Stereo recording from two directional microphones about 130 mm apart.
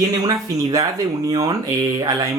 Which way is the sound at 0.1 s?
30° right (ahead or behind).